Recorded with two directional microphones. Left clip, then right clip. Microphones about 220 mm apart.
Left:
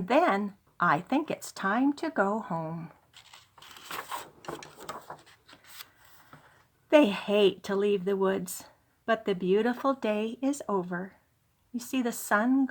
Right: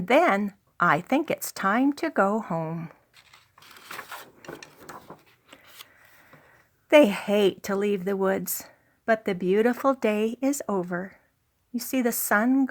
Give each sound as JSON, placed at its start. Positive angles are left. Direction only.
{"t": 0.0, "sound": "speech", "side_deg": -40}
{"t": 3.2, "sound": "a sound", "side_deg": -5}
{"t": 6.8, "sound": "speech", "side_deg": -40}